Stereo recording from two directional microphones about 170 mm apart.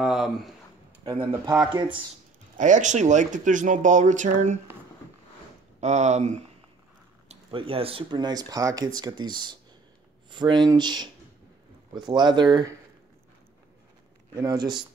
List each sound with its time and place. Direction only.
0.0 s speech: centre (ahead or behind)
1.0 s speech: 25° right (ahead or behind)
1.5 s speech: centre (ahead or behind)
2.5 s speech: 45° right (ahead or behind)
5.8 s speech: 40° right (ahead or behind); by 11.1 s 25° right (ahead or behind)
12.1 s speech: 25° right (ahead or behind)
14.3 s speech: 20° right (ahead or behind)